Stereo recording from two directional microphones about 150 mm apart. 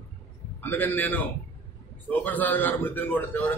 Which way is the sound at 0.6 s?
15° left (ahead or behind).